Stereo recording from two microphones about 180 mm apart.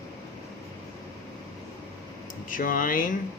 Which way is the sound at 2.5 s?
50° left (ahead or behind).